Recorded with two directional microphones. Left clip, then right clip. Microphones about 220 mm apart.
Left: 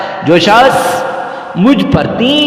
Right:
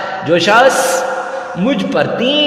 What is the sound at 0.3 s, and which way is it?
A man's voice, 25° left (ahead or behind).